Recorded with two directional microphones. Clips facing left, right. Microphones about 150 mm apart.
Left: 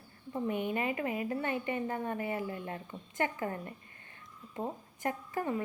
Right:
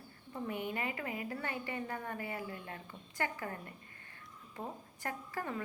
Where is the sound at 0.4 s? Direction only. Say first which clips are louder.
Left 5 dB; 20° left (ahead or behind).